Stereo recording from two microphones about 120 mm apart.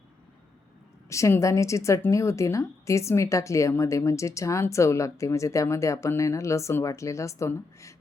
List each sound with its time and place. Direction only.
1.1 s a woman's voice: 25° left (ahead or behind)